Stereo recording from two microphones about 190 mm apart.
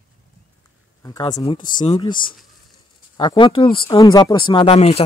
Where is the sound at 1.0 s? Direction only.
20° left (ahead or behind).